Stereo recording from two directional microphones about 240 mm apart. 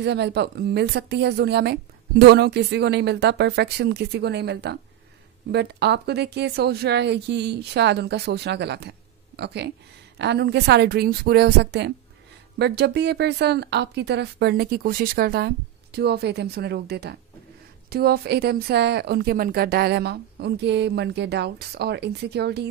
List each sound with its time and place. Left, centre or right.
0.0 s a woman's voice: right